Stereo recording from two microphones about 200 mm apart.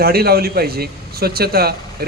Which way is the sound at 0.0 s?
50° right (ahead or behind).